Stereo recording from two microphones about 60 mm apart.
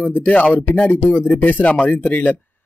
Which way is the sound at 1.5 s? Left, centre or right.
Left.